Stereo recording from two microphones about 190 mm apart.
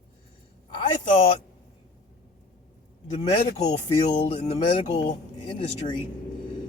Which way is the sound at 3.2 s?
20° left (ahead or behind).